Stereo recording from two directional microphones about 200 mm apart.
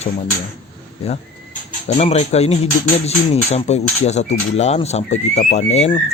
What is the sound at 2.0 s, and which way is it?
Speech, 30° left (ahead or behind).